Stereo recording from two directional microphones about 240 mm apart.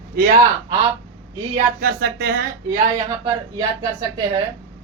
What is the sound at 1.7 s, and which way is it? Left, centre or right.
Speech, right.